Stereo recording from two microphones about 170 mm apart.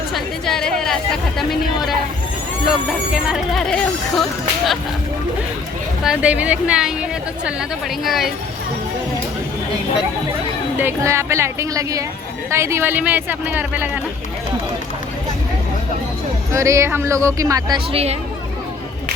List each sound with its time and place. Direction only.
0.1 s chatter: 5° left (ahead or behind)
1.4 s speech: centre (ahead or behind)
3.1 s speech: 5° right (ahead or behind)
6.1 s speech: 5° right (ahead or behind)
8.0 s speech: centre (ahead or behind)
10.8 s speech: 15° right (ahead or behind)
16.5 s speech: 15° right (ahead or behind)
17.9 s speech: 40° right (ahead or behind)